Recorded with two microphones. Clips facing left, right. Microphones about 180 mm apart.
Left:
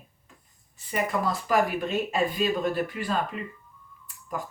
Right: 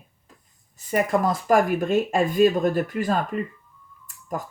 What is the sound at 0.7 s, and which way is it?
Speech, 45° right (ahead or behind).